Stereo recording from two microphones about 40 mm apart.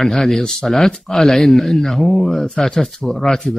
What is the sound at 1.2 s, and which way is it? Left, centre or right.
Speech, centre.